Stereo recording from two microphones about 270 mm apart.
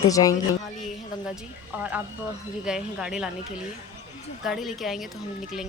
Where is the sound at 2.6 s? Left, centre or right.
Centre.